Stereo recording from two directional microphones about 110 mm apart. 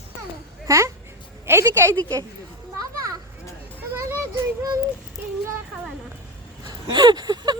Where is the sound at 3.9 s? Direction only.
25° right (ahead or behind).